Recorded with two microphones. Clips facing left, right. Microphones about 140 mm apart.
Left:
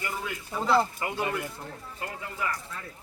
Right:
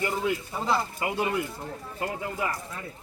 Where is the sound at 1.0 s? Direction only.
15° right (ahead or behind).